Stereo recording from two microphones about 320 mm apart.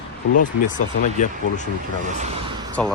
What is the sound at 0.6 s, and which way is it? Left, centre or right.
Speech, left.